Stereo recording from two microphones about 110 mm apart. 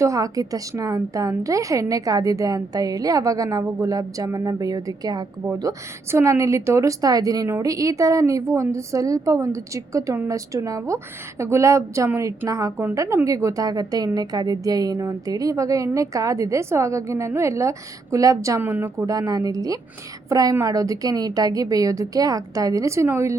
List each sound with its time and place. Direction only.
0.0 s a woman's voice: 30° right (ahead or behind)
6.1 s a woman's voice: 25° right (ahead or behind)